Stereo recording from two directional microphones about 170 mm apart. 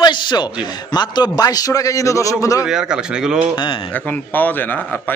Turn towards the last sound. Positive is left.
turn(degrees=10)  # may be behind; listen again after turning